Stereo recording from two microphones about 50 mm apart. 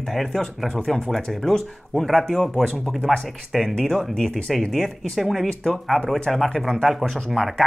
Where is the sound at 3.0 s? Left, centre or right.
Centre.